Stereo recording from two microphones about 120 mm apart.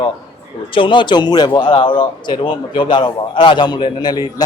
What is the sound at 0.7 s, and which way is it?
A man's voice, 45° left (ahead or behind).